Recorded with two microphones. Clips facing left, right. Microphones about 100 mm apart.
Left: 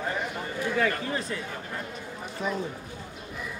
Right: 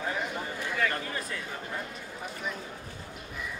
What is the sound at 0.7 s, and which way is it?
Speech, 35° left (ahead or behind).